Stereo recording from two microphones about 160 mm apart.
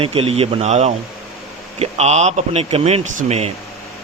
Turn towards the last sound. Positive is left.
turn(degrees=-45)  # may be behind; listen again after turning